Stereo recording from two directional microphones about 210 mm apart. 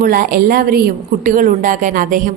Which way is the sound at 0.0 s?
45° right (ahead or behind).